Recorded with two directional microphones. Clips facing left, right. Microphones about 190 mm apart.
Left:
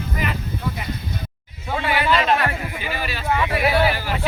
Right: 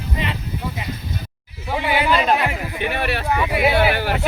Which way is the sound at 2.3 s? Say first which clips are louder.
Right 1 dB; 15° right (ahead or behind).